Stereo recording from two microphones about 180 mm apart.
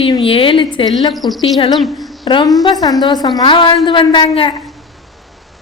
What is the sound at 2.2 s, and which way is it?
A woman's voice, 25° left (ahead or behind).